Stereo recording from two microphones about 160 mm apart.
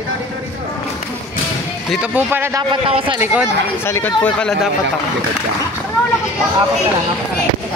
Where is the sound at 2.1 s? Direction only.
15° right (ahead or behind).